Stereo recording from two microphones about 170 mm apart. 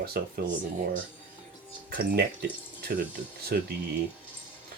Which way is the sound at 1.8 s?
70° right (ahead or behind).